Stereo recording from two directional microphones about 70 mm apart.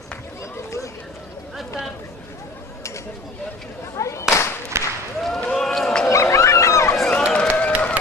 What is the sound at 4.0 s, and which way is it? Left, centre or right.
Clapping, left.